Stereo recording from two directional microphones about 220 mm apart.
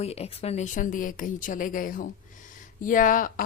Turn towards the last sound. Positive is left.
turn(degrees=40)  # may be behind; listen again after turning